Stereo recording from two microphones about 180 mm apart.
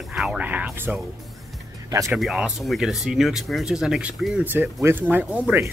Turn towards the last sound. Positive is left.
turn(degrees=-10)  # may be behind; listen again after turning